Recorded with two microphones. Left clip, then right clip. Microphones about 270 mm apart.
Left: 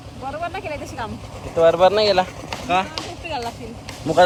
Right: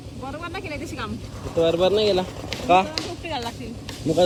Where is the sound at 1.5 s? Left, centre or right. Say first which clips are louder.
Left 5 dB; centre.